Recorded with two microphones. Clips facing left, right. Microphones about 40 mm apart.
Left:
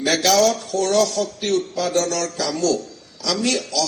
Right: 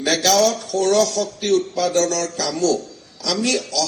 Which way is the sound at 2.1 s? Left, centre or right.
Left.